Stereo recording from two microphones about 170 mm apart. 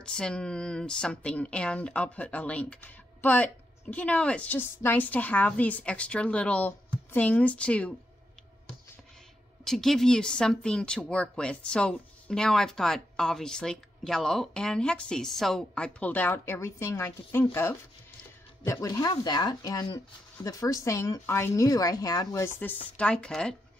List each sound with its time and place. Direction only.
0.0 s speech: 5° left (ahead or behind)
9.7 s speech: centre (ahead or behind)
18.6 s speech: 20° left (ahead or behind)